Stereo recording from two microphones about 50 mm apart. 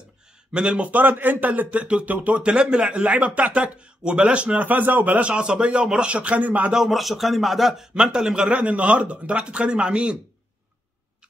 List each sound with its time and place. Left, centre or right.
0.5 s speech: right
0.8 s speech: right
4.6 s speech: right
5.3 s speech: centre
6.7 s a man's voice: centre
7.9 s speech: centre
8.5 s speech: right